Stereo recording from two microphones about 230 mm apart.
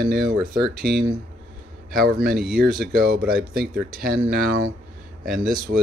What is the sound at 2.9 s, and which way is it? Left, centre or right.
Speech, right.